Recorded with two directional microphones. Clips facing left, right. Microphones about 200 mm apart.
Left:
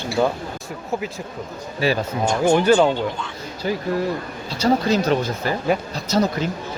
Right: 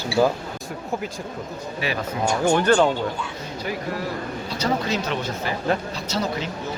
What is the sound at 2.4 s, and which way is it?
Speech, 10° left (ahead or behind).